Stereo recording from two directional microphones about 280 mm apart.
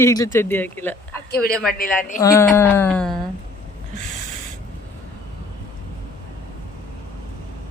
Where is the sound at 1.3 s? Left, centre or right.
Left.